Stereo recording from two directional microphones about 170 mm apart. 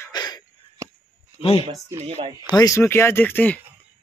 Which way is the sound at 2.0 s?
40° right (ahead or behind).